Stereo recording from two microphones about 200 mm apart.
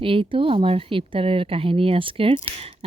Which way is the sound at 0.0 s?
25° right (ahead or behind).